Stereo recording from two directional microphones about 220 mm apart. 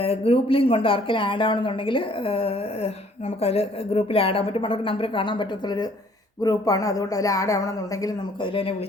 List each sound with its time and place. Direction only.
0.0 s speech: 25° left (ahead or behind)